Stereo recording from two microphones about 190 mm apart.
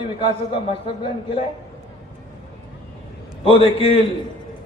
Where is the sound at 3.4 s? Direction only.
30° left (ahead or behind).